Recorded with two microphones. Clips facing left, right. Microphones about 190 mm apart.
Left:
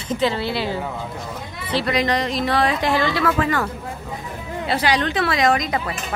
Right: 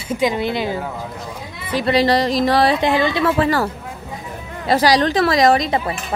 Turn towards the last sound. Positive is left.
turn(degrees=-25)  # may be behind; listen again after turning